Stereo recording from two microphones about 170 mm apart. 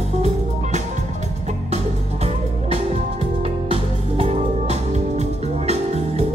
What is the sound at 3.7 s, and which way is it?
Music, 35° right (ahead or behind).